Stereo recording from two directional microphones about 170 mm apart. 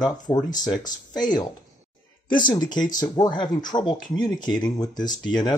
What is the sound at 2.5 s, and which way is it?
Speech, 25° left (ahead or behind).